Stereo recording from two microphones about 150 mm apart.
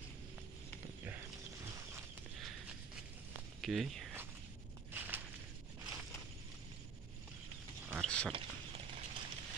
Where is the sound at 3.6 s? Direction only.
Centre (ahead or behind).